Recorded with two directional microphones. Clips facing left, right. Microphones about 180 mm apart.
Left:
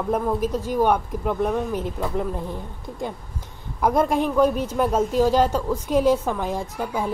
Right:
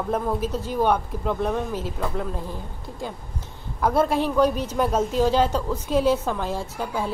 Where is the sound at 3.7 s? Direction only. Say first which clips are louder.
Left 1 dB; 15° left (ahead or behind).